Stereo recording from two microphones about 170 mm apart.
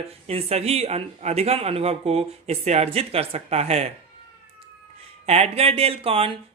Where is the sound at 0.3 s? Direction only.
35° right (ahead or behind).